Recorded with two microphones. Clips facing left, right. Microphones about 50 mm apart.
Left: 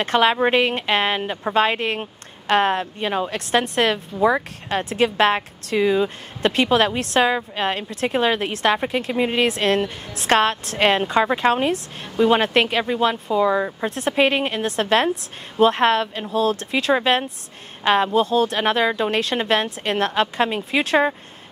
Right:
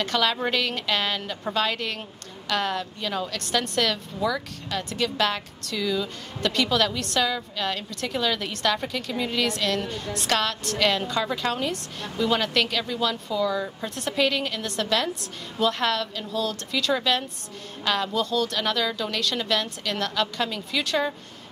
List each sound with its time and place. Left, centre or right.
0.0 s a woman's voice: left